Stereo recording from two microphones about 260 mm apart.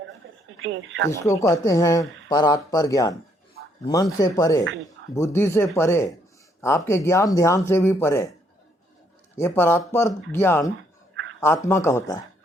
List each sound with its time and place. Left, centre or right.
0.5 s speech: right
1.2 s speech: centre
9.4 s speech: centre
11.1 s a sound: right
11.3 s speech: centre